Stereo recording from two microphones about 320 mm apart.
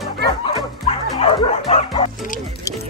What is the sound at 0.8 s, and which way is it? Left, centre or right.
Bow-wow, centre.